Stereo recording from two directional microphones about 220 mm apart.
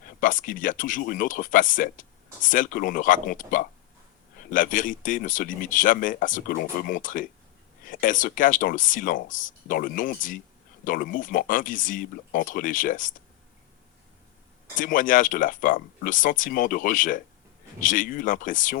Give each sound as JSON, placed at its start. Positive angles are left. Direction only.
{"t": 0.0, "sound": "speech", "side_deg": 35}
{"t": 14.8, "sound": "speech", "side_deg": 40}